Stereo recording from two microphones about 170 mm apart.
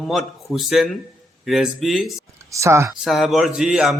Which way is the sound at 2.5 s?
15° right (ahead or behind).